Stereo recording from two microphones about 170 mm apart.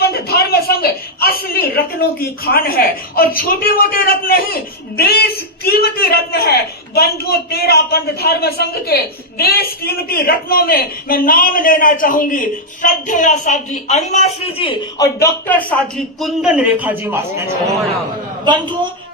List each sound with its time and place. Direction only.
0.0 s a man's voice: 65° left (ahead or behind); by 17.4 s 10° right (ahead or behind)
18.4 s a man's voice: 25° right (ahead or behind)